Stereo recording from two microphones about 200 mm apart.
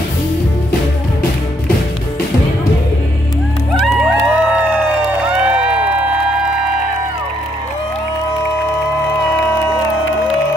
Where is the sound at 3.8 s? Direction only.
Centre (ahead or behind).